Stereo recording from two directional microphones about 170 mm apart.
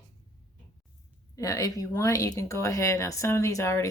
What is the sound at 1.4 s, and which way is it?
Speech, 20° left (ahead or behind).